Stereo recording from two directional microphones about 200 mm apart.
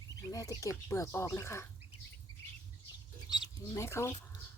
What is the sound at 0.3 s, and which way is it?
Speech, 15° left (ahead or behind).